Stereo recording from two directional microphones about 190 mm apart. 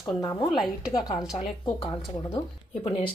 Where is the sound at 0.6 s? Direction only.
5° right (ahead or behind).